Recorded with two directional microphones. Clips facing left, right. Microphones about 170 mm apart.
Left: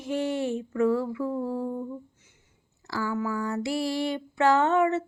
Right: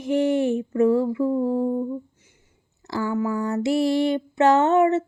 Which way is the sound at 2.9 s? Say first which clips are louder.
Right 4 dB; 20° right (ahead or behind).